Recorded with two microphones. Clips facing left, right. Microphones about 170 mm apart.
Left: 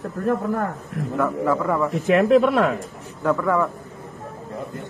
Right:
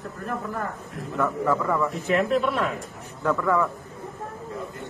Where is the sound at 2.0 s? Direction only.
50° left (ahead or behind).